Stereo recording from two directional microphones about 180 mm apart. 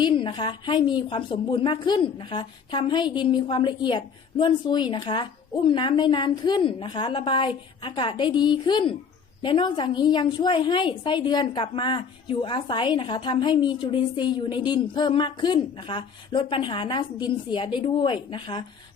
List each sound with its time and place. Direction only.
0.0 s a woman's voice: 25° left (ahead or behind)